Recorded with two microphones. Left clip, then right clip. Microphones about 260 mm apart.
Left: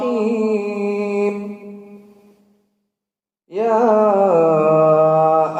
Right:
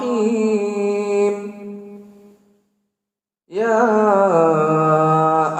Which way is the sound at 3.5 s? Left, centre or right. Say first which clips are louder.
Left 1 dB; right.